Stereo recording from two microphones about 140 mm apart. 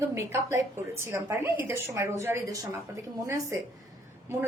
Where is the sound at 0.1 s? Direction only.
20° right (ahead or behind).